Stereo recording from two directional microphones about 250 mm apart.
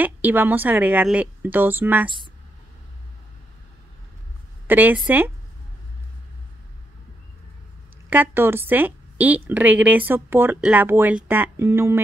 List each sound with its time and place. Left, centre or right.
0.0 s a woman's voice: centre
4.6 s a woman's voice: centre
8.1 s a woman's voice: centre